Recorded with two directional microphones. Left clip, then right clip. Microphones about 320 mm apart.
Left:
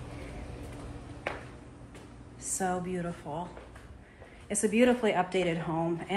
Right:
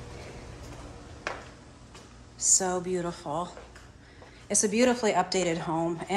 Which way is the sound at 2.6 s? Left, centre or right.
Centre.